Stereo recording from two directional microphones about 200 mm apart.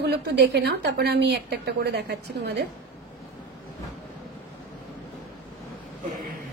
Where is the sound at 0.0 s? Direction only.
55° right (ahead or behind).